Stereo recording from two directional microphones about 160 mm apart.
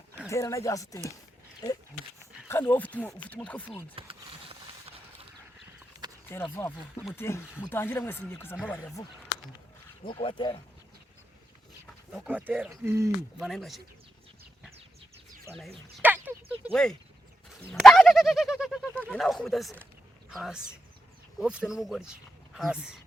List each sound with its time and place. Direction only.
0.3 s speech: 20° left (ahead or behind)
2.5 s speech: 15° left (ahead or behind)
3.9 s a sound: 35° right (ahead or behind)
6.3 s speech: 15° left (ahead or behind)
10.0 s speech: 35° left (ahead or behind)
11.9 s speech: 5° right (ahead or behind)
13.4 s speech: centre (ahead or behind)
16.0 s a sound: 10° right (ahead or behind)
16.7 s speech: 5° left (ahead or behind)